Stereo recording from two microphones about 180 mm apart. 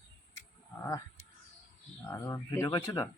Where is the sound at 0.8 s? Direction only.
15° left (ahead or behind).